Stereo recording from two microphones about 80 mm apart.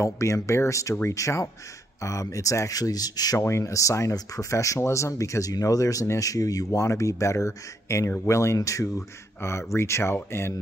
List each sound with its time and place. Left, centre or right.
0.0 s speech: left
3.3 s speech: left